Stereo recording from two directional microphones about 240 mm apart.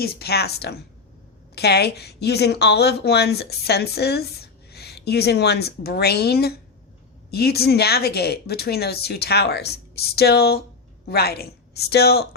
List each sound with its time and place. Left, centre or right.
0.0 s a woman's voice: left